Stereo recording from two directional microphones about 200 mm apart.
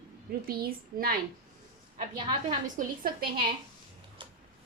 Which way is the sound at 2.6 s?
40° right (ahead or behind).